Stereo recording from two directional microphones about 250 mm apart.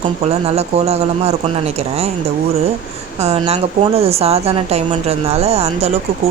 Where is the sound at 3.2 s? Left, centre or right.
Right.